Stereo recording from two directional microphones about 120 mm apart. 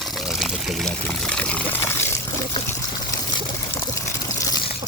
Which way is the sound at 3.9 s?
25° left (ahead or behind).